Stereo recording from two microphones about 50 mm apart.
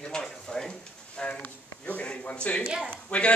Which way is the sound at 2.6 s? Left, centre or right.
Centre.